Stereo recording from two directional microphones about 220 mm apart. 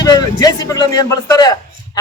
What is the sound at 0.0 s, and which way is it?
A man's voice, 15° left (ahead or behind).